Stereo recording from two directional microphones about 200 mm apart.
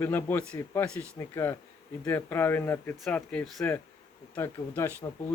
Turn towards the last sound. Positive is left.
turn(degrees=10)  # may be behind; listen again after turning